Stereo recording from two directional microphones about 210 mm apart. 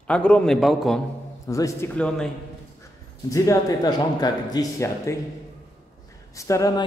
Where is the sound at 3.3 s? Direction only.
15° left (ahead or behind).